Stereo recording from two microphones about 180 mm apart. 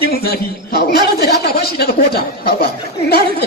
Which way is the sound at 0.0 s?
60° left (ahead or behind).